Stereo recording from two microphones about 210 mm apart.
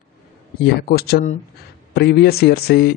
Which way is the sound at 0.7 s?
45° left (ahead or behind).